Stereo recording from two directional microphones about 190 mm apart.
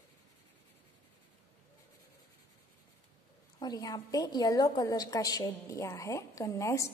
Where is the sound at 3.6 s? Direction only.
20° left (ahead or behind).